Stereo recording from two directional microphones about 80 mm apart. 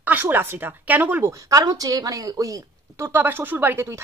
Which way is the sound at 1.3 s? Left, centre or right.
Right.